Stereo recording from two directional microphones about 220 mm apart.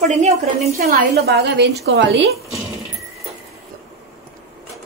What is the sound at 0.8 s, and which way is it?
A woman's voice, 45° right (ahead or behind).